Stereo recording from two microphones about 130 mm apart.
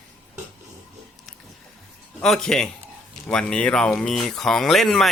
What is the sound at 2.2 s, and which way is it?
Speech, 5° left (ahead or behind).